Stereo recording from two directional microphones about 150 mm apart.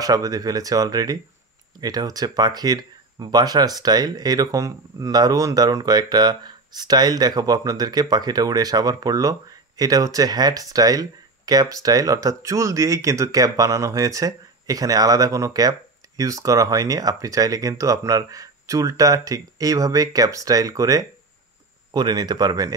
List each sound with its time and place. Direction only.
0.0 s speech: 25° right (ahead or behind)